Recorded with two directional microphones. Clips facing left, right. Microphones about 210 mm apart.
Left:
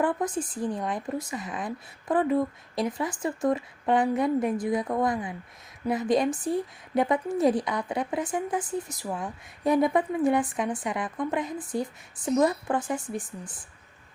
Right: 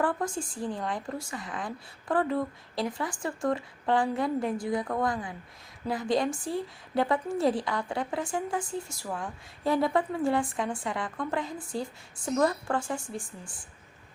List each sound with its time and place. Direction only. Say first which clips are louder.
0.0 s a woman's voice: left 3 dB; 20° left (ahead or behind)